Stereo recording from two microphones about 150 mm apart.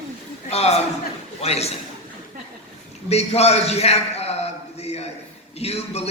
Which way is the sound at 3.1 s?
45° left (ahead or behind).